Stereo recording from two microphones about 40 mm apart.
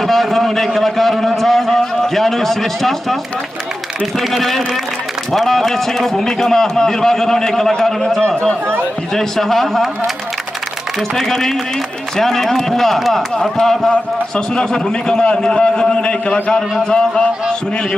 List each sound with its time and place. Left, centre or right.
0.0 s a sound: centre
4.3 s a man's voice: centre
8.2 s a man's voice: left
9.1 s a man's voice: centre
11.1 s a man's voice: centre